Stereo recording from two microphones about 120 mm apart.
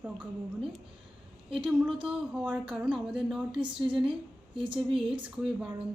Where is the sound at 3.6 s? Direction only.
40° right (ahead or behind).